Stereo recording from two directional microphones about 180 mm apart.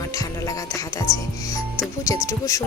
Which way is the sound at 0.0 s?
20° left (ahead or behind).